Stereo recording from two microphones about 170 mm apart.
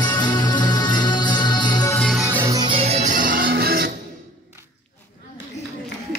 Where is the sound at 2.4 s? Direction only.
25° right (ahead or behind); by 3.9 s 65° right (ahead or behind).